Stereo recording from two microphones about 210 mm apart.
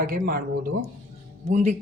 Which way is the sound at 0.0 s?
45° right (ahead or behind).